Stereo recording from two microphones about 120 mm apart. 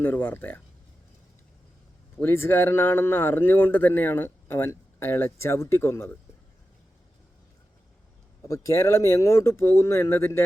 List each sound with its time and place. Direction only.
0.0 s speech: 15° left (ahead or behind)
2.1 s speech: 20° left (ahead or behind)
8.4 s speech: 25° left (ahead or behind)